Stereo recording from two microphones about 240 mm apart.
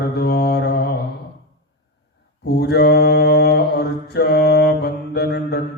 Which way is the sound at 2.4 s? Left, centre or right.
Left.